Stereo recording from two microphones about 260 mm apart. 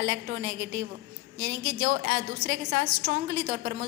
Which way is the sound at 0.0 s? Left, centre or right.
Right.